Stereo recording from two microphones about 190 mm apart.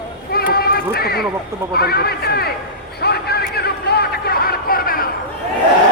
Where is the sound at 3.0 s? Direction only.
55° left (ahead or behind).